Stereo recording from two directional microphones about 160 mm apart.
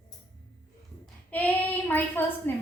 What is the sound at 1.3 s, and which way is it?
Child singing, 10° left (ahead or behind).